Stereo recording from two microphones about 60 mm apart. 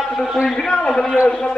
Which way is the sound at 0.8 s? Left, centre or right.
Centre.